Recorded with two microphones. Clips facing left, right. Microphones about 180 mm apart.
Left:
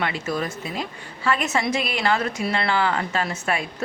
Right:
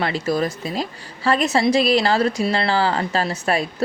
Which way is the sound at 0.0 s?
35° right (ahead or behind).